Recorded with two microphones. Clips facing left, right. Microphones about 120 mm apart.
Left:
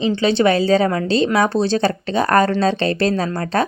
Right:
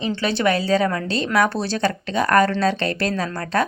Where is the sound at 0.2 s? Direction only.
25° left (ahead or behind).